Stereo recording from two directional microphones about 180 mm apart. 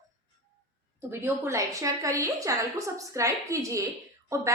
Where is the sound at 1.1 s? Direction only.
15° right (ahead or behind).